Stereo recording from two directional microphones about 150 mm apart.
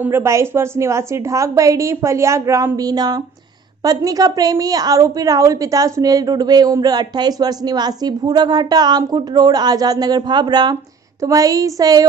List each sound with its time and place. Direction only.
0.0 s a woman's voice: 15° right (ahead or behind)